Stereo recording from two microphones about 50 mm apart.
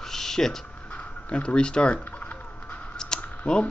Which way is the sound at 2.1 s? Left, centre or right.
Left.